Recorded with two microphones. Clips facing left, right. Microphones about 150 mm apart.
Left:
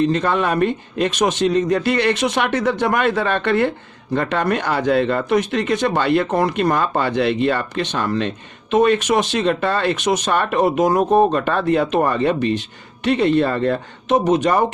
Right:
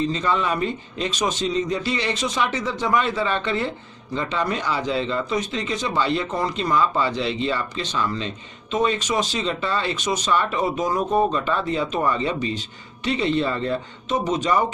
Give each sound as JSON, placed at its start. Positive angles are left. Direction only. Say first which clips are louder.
{"t": 0.0, "sound": "speech", "louder": "left 5 dB", "side_deg": 60}